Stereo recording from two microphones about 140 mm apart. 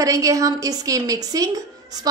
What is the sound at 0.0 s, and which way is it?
A woman's voice, 25° right (ahead or behind).